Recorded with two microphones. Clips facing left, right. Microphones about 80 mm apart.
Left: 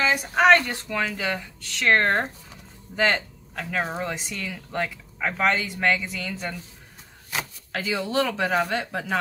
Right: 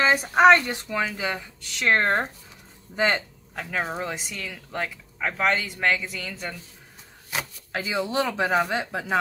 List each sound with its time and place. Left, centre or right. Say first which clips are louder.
0.3 s speech: right 1 dB; right
3.7 s speech: left 1 dB; centre
7.2 s speech: even; centre